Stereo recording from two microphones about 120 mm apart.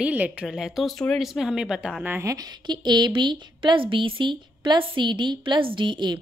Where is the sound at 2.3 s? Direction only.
35° right (ahead or behind).